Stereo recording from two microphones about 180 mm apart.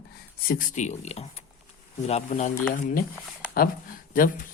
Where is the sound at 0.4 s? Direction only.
50° left (ahead or behind).